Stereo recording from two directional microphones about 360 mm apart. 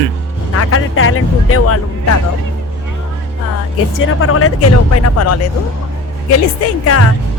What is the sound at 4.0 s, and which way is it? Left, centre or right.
Speech, left.